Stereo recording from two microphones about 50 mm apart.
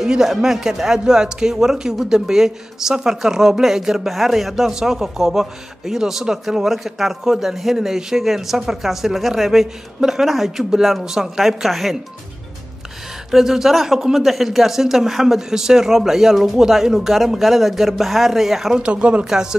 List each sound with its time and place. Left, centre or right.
0.0 s speech: centre
13.3 s speech: centre
18.8 s speech: right